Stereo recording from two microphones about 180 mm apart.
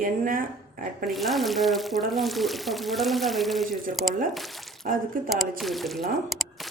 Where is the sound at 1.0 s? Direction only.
Centre (ahead or behind).